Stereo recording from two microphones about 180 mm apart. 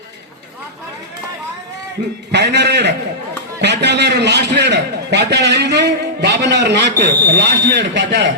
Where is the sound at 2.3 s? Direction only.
70° right (ahead or behind).